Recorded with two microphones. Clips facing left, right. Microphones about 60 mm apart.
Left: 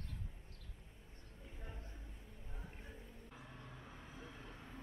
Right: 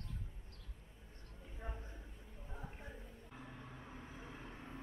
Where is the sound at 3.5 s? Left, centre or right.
Centre.